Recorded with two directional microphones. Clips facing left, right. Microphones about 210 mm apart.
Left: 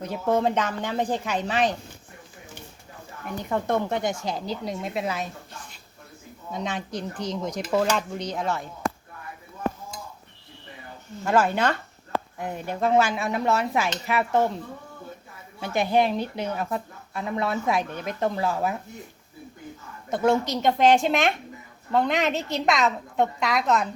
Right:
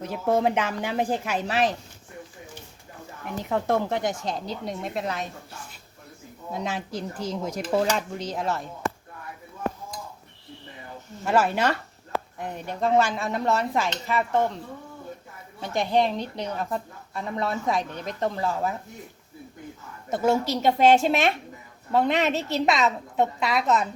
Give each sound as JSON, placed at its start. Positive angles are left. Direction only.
{"t": 0.0, "sound": "a woman's voice", "side_deg": -5}
{"t": 3.5, "sound": "speech", "side_deg": 0}
{"t": 6.5, "sound": "speech", "side_deg": -5}
{"t": 11.3, "sound": "speech", "side_deg": -5}
{"t": 12.4, "sound": "speech", "side_deg": 5}
{"t": 15.6, "sound": "speech", "side_deg": 5}
{"t": 20.1, "sound": "speech", "side_deg": -5}